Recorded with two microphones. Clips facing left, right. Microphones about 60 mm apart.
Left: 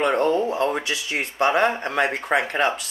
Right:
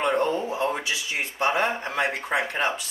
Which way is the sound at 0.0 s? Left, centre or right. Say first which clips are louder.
Left 4 dB; left.